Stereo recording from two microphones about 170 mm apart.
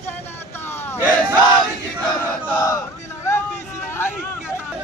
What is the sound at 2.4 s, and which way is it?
Crowd, 15° left (ahead or behind).